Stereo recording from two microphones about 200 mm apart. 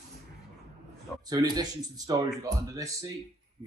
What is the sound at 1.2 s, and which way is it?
Speech, 20° right (ahead or behind).